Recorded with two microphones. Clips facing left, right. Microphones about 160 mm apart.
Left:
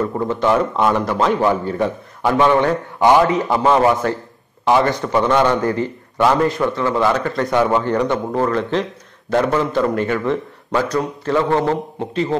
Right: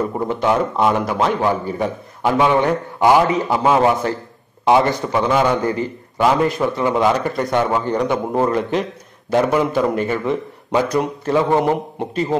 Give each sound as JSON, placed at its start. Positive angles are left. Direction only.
{"t": 0.0, "sound": "a man's voice", "side_deg": -15}
{"t": 5.1, "sound": "a man's voice", "side_deg": -5}
{"t": 7.4, "sound": "a man's voice", "side_deg": 0}